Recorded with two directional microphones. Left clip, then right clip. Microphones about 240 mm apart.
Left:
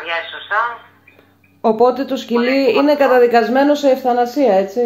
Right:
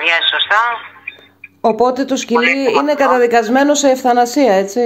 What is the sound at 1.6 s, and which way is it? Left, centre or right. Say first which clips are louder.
A man's voice: even; right.